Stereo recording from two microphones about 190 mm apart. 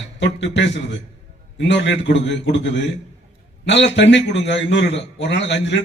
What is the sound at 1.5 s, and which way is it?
A man's voice, 70° left (ahead or behind).